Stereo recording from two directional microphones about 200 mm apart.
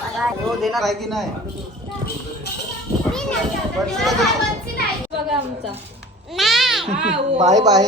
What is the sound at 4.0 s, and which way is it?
Speech, centre (ahead or behind).